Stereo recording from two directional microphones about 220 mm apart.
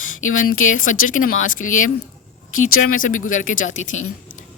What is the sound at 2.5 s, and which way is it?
Speech, 70° left (ahead or behind).